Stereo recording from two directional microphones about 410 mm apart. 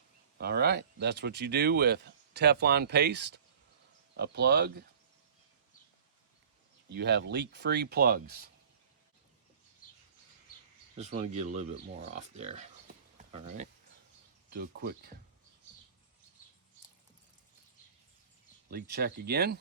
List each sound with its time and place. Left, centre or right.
0.3 s speech: right
6.9 s speech: right
10.9 s speech: centre
13.1 s a sound: centre
14.5 s speech: right
18.7 s speech: right